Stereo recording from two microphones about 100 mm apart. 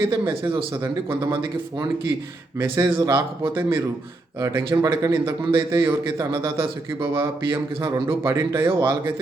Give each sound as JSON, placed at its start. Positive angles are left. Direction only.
{"t": 0.0, "sound": "a man's voice", "side_deg": -25}
{"t": 2.6, "sound": "a man's voice", "side_deg": -25}
{"t": 4.4, "sound": "a man's voice", "side_deg": -30}